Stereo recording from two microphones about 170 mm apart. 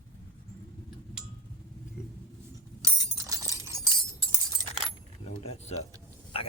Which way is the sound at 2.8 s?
20° right (ahead or behind).